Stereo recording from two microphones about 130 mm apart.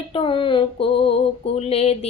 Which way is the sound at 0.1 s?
40° left (ahead or behind).